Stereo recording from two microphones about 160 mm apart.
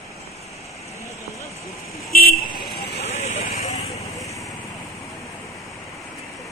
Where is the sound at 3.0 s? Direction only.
45° left (ahead or behind).